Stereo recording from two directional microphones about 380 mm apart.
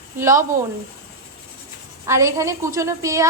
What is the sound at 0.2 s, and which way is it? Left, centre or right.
Speech, centre.